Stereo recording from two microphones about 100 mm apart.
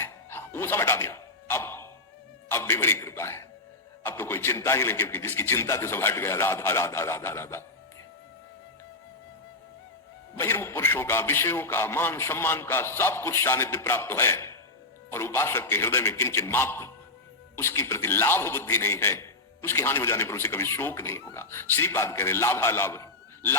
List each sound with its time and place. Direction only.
0.0 s a sound: 25° left (ahead or behind)
2.5 s music: 25° left (ahead or behind)
4.0 s a man's voice: 25° left (ahead or behind)
10.3 s a man's voice: 25° left (ahead or behind)